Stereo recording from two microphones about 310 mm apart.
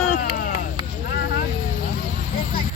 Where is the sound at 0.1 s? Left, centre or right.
Left.